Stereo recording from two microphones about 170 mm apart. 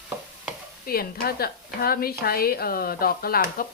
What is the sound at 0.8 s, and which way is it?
A woman's voice, 60° left (ahead or behind).